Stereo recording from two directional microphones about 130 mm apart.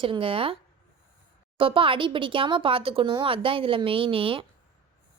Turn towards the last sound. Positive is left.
turn(degrees=-45)  # may be behind; listen again after turning